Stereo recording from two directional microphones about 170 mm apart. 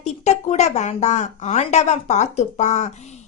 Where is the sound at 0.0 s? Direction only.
40° left (ahead or behind).